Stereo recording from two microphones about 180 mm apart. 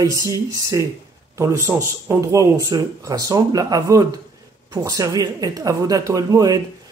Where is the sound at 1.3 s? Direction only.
15° right (ahead or behind).